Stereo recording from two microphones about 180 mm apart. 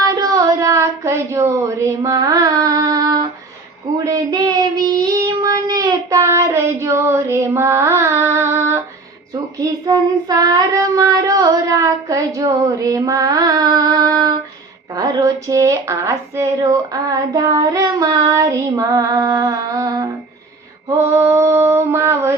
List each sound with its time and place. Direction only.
0.0 s a sound: 20° right (ahead or behind)
5.0 s child singing: 20° right (ahead or behind)
14.9 s a woman's voice: 20° right (ahead or behind)
21.1 s mantra: 15° right (ahead or behind)